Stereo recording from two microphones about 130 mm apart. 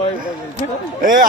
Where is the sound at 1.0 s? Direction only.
90° right.